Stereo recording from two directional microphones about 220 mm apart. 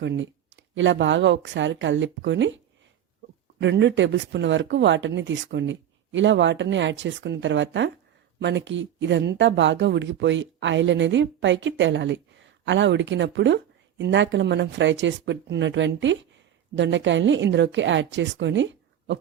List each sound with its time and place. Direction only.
0.0 s speech: 55° right (ahead or behind)
3.6 s speech: 55° right (ahead or behind)